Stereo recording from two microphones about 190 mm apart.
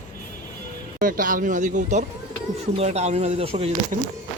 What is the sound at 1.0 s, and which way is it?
Speech, 45° right (ahead or behind).